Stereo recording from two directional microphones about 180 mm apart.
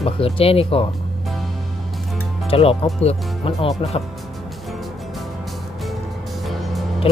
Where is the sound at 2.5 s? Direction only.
30° left (ahead or behind).